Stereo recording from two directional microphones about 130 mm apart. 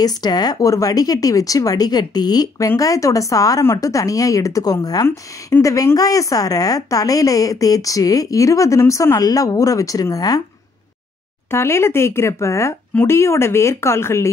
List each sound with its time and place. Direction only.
0.0 s speech: 30° left (ahead or behind)
11.5 s speech: 20° left (ahead or behind)